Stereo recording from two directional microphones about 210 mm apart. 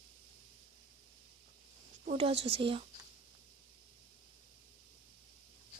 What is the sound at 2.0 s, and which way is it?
Speech, 30° right (ahead or behind).